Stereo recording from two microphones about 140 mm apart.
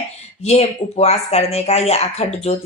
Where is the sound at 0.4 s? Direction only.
50° left (ahead or behind).